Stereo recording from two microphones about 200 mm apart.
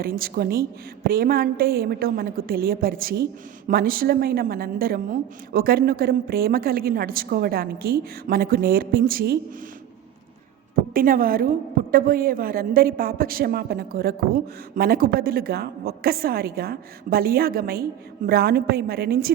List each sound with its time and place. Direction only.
0.0 s a woman's voice: 50° right (ahead or behind)
10.9 s a woman's voice: 45° right (ahead or behind)